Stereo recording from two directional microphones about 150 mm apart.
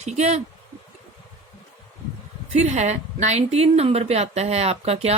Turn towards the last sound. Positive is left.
turn(degrees=-45)  # may be behind; listen again after turning